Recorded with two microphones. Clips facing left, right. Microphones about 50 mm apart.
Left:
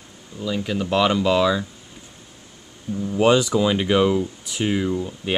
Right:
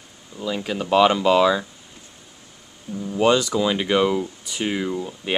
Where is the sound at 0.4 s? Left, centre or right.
Centre.